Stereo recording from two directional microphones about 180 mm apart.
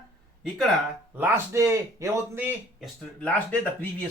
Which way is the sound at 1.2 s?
15° right (ahead or behind).